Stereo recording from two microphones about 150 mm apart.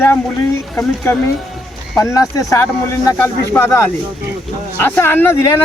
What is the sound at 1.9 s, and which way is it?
Speech, 20° left (ahead or behind).